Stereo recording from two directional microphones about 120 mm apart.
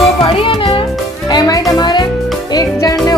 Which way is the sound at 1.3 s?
30° left (ahead or behind).